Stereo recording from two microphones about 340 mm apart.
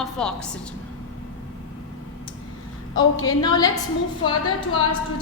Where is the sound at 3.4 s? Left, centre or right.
Centre.